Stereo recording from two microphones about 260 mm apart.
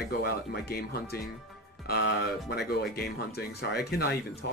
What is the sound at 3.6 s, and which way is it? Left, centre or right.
Speech, left.